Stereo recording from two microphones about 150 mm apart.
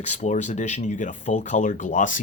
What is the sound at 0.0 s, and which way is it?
Speech, 50° left (ahead or behind).